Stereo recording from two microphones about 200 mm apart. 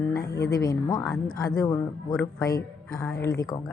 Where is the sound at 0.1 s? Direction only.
15° left (ahead or behind).